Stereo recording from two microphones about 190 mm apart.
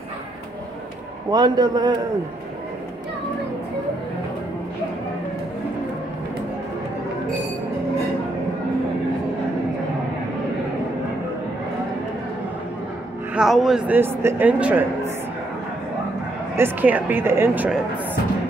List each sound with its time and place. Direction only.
1.3 s a man's voice: 20° right (ahead or behind)
13.3 s speech: centre (ahead or behind)
16.5 s speech: 10° right (ahead or behind)